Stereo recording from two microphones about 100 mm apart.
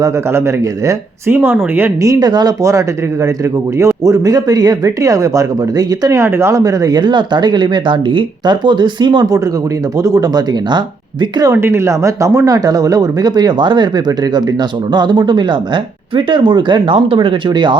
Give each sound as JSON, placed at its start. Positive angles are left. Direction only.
{"t": 0.0, "sound": "speech", "side_deg": -25}
{"t": 2.0, "sound": "speech", "side_deg": -45}
{"t": 11.5, "sound": "speech", "side_deg": -25}